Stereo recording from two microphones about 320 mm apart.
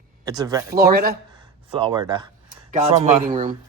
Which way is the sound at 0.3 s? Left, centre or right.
Centre.